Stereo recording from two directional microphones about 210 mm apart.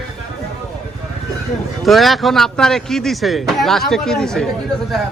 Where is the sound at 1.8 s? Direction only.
Centre (ahead or behind).